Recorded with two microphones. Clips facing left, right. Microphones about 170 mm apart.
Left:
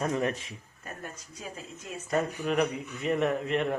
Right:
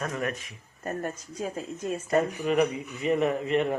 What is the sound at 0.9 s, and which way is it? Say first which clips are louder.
Speech: right 10 dB; 45° right (ahead or behind).